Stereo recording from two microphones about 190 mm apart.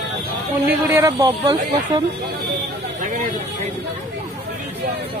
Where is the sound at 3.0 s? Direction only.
40° right (ahead or behind).